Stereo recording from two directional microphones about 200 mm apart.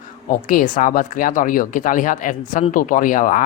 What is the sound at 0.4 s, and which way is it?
Speech, 40° left (ahead or behind).